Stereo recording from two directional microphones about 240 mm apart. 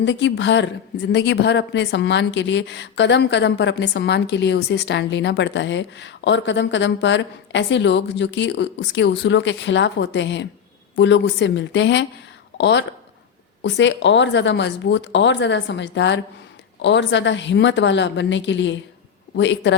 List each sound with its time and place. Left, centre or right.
0.0 s a woman's voice: left